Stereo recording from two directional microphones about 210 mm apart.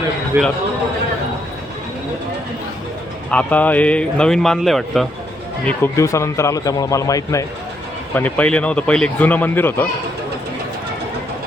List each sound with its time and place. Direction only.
0.3 s a man's voice: 10° right (ahead or behind)
3.2 s a man's voice: 5° left (ahead or behind)
5.6 s a man's voice: 10° left (ahead or behind)